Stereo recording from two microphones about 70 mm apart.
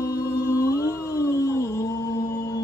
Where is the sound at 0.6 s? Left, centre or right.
Left.